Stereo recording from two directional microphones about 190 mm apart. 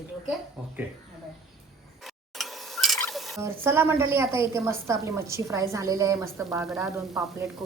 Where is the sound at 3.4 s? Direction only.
10° right (ahead or behind).